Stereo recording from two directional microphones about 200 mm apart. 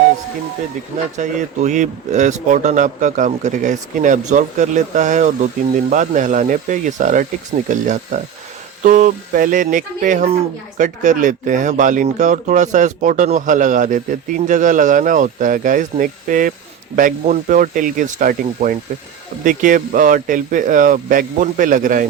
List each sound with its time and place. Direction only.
1.1 s speech: 35° right (ahead or behind)